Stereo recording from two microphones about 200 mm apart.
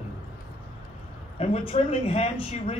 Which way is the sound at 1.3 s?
30° left (ahead or behind).